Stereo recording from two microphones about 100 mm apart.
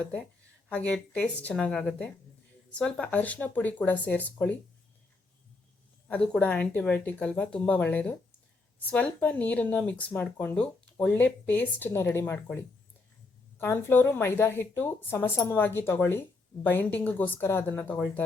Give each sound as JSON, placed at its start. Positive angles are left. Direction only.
{"t": 0.7, "sound": "speech", "side_deg": 15}
{"t": 6.1, "sound": "speech", "side_deg": 10}
{"t": 13.6, "sound": "speech", "side_deg": 20}